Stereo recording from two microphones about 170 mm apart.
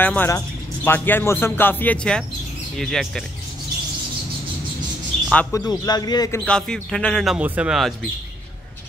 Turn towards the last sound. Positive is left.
turn(degrees=0)  # may be behind; listen again after turning